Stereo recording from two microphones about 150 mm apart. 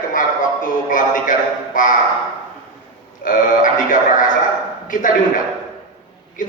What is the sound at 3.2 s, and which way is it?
A man's voice, 65° left (ahead or behind).